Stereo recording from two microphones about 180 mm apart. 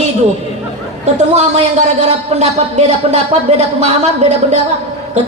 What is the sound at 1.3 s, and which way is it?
A man's voice, 40° right (ahead or behind).